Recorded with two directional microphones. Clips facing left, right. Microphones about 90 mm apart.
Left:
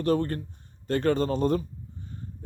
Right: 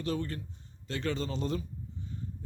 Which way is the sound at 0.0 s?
50° left (ahead or behind).